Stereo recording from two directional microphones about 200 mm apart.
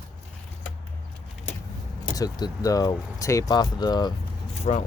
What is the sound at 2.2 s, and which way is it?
Speech, 20° left (ahead or behind).